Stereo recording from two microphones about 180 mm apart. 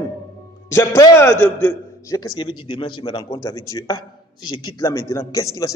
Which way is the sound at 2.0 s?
20° left (ahead or behind).